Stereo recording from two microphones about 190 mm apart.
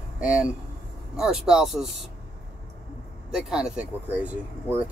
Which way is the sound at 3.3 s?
5° right (ahead or behind).